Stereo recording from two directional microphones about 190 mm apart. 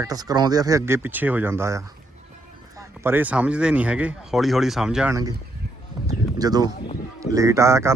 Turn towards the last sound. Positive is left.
turn(degrees=-15)  # may be behind; listen again after turning